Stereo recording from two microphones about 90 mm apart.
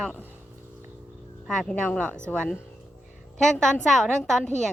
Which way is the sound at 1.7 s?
15° left (ahead or behind).